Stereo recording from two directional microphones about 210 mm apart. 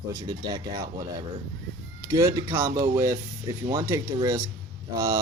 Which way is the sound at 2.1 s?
15° right (ahead or behind).